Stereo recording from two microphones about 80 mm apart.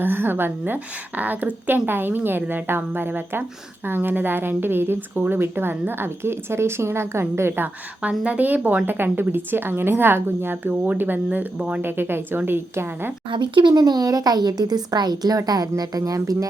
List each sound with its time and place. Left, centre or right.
0.0 s a woman's voice: right
11.8 s a woman's voice: right
13.3 s speech: right